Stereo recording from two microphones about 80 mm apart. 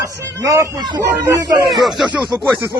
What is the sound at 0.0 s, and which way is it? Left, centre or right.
Speech, right.